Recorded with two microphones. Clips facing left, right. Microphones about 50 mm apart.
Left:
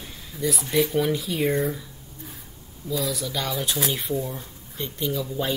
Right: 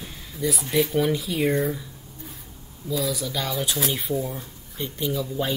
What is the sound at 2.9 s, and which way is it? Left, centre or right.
Speech, centre.